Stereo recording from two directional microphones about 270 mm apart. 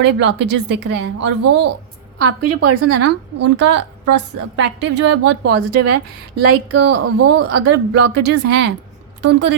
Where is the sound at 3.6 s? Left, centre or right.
Right.